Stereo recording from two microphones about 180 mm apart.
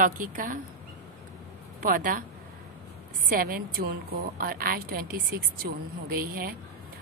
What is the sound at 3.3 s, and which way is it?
A woman's voice, 55° right (ahead or behind).